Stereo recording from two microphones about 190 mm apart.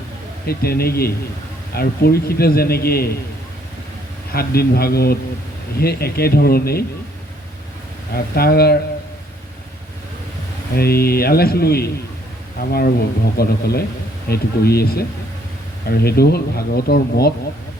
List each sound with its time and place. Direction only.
0.4 s a man's voice: 55° left (ahead or behind)
4.4 s speech: 55° left (ahead or behind)
8.1 s speech: 55° left (ahead or behind)
10.8 s a man's voice: 55° left (ahead or behind)